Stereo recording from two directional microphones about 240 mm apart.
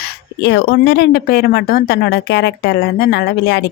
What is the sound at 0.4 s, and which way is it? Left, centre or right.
Speech, left.